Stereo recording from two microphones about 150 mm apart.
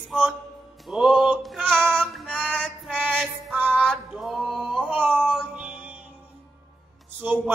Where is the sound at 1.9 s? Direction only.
5° left (ahead or behind).